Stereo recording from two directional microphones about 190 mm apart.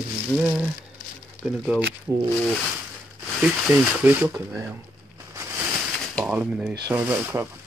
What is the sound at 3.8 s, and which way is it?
Speech, 10° right (ahead or behind).